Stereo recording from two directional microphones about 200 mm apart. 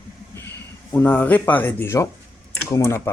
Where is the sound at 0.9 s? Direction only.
10° left (ahead or behind).